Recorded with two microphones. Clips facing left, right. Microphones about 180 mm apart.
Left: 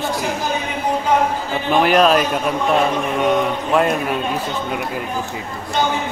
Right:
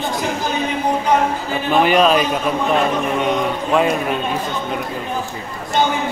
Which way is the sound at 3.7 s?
Centre (ahead or behind).